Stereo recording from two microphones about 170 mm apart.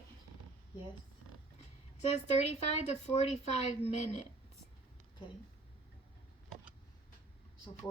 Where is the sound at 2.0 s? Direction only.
40° left (ahead or behind).